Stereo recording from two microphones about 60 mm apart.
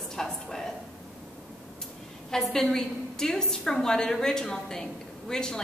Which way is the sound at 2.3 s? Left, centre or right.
Centre.